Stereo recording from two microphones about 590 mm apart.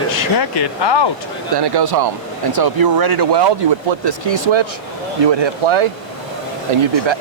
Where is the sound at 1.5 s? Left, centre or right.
Right.